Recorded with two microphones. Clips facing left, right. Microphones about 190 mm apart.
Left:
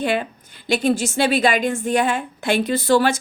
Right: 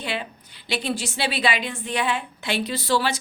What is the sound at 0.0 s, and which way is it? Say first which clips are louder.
A woman's voice: left 8 dB; 50° left (ahead or behind).